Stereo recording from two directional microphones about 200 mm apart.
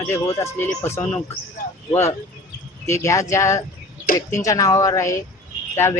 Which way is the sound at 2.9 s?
15° left (ahead or behind).